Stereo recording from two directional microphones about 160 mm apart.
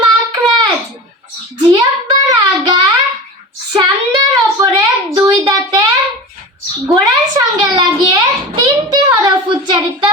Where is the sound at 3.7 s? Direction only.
25° right (ahead or behind).